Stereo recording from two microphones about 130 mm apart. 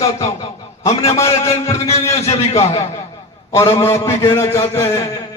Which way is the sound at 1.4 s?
25° left (ahead or behind).